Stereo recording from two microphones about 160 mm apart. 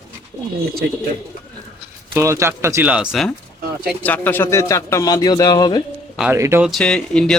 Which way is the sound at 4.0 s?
10° left (ahead or behind).